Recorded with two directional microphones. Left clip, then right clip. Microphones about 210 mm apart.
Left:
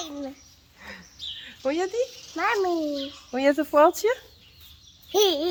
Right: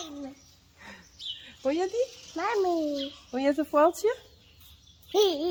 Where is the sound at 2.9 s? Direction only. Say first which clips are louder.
Left 3 dB; 10° left (ahead or behind).